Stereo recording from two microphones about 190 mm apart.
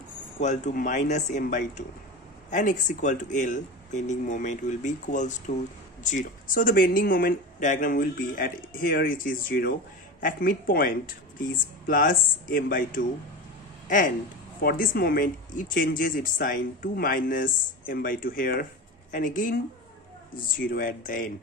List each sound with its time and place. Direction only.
0.4 s speech: 40° left (ahead or behind)